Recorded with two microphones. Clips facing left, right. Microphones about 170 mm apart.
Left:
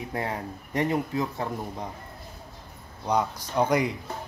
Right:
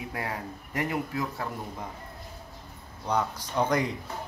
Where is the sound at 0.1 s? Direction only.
20° left (ahead or behind).